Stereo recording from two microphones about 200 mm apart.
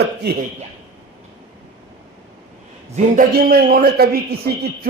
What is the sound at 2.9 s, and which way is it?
Speech, 45° right (ahead or behind).